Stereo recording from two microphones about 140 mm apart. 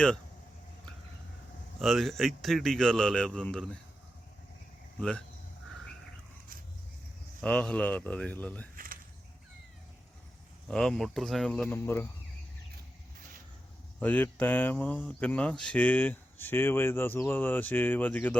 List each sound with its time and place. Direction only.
1.8 s a man's voice: centre (ahead or behind)
4.9 s speech: 10° left (ahead or behind)
7.4 s speech: 10° left (ahead or behind)
8.7 s a sound: 85° right
10.7 s a man's voice: 5° left (ahead or behind)
14.0 s speech: 10° left (ahead or behind)